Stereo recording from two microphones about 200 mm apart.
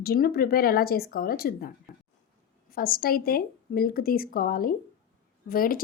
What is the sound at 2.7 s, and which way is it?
A woman's voice, 45° left (ahead or behind).